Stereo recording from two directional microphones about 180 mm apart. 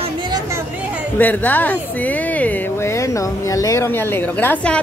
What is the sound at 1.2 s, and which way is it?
Speech, 10° left (ahead or behind).